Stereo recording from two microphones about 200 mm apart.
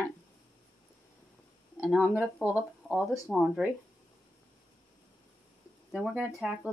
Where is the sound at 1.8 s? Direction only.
5° right (ahead or behind).